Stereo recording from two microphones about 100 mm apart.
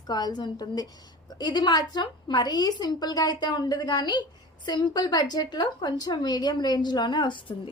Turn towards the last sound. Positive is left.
turn(degrees=55)  # may be behind; listen again after turning